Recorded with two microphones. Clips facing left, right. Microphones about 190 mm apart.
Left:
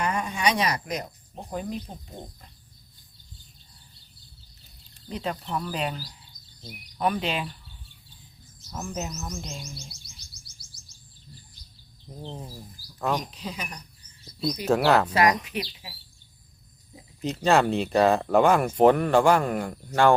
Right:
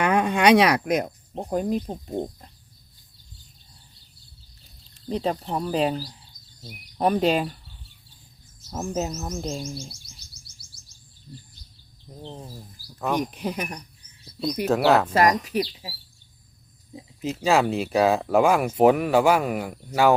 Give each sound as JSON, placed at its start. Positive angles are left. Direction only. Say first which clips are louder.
{"t": 0.0, "sound": "speech", "louder": "right 7 dB", "side_deg": -65}
{"t": 5.0, "sound": "speech", "louder": "right 6 dB", "side_deg": -35}
{"t": 7.0, "sound": "speech", "louder": "right 6 dB", "side_deg": -40}
{"t": 8.8, "sound": "speech", "louder": "right 6 dB", "side_deg": -30}
{"t": 9.4, "sound": "guitar", "louder": "right 9 dB", "side_deg": -45}
{"t": 12.0, "sound": "speech", "louder": "even", "side_deg": 5}
{"t": 13.3, "sound": "speech", "louder": "right 7 dB", "side_deg": -55}
{"t": 14.6, "sound": "speech", "louder": "right 2 dB", "side_deg": 0}
{"t": 15.1, "sound": "speech", "louder": "right 3 dB", "side_deg": -40}
{"t": 17.2, "sound": "speech", "louder": "even", "side_deg": -5}